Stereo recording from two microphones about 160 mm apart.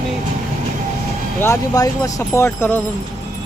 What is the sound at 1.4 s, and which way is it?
Speech, 20° left (ahead or behind).